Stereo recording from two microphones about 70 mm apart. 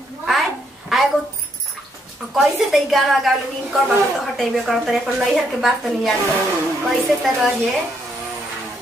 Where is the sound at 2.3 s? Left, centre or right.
Centre.